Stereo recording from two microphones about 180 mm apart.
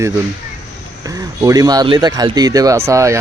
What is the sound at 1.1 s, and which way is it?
Speech, 20° right (ahead or behind).